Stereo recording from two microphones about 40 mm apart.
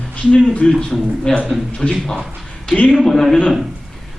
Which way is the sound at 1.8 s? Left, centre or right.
Centre.